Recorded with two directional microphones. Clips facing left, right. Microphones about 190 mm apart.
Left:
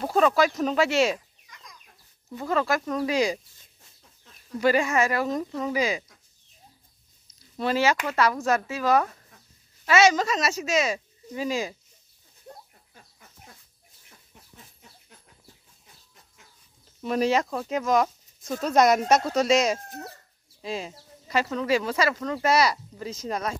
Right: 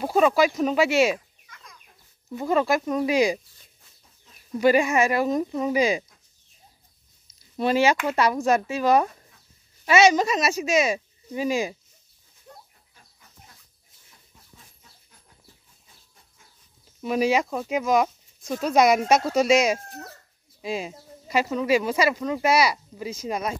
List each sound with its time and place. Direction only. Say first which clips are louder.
0.0 s speech: right 2 dB; 10° right (ahead or behind)
2.3 s speech: right 3 dB; 15° right (ahead or behind)
4.6 s speech: right 3 dB; 15° right (ahead or behind)
7.5 s speech: right 3 dB; 15° right (ahead or behind)
17.0 s speech: right 1 dB; 5° right (ahead or behind)